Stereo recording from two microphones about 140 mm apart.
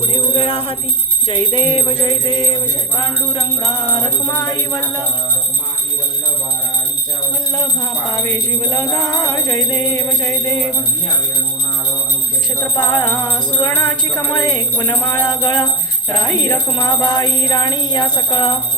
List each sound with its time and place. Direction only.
0.1 s music: 40° left (ahead or behind)
3.0 s speech: 30° left (ahead or behind)
8.1 s speech: 20° left (ahead or behind)
12.7 s speech: 30° left (ahead or behind)